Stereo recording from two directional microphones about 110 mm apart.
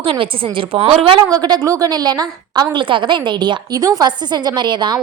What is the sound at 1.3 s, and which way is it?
A woman's voice, 35° right (ahead or behind).